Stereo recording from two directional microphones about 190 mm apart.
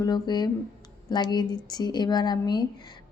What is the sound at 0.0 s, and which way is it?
A woman's voice, 20° left (ahead or behind).